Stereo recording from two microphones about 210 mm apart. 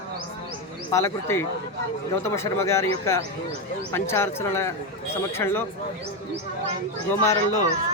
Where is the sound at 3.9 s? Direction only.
10° left (ahead or behind).